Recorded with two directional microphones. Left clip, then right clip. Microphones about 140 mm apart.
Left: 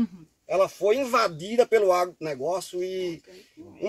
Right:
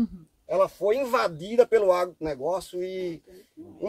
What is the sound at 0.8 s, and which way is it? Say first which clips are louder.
Speech: left 1 dB; 25° right (ahead or behind).